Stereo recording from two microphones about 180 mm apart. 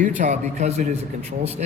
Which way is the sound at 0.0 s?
45° right (ahead or behind).